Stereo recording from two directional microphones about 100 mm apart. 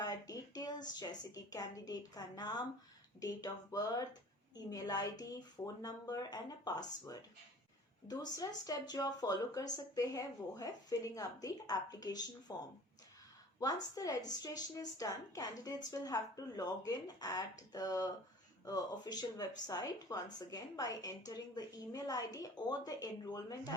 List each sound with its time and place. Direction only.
0.0 s speech: 40° left (ahead or behind)
13.6 s speech: 40° left (ahead or behind)